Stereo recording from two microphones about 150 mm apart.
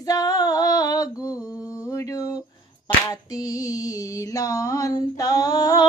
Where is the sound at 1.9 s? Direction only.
20° left (ahead or behind).